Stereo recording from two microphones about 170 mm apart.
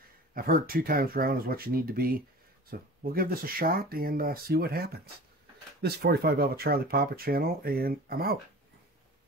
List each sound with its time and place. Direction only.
0.3 s speech: 55° right (ahead or behind)